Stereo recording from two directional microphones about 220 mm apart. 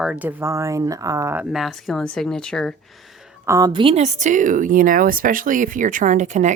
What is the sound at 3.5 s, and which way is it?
Speech, 15° right (ahead or behind).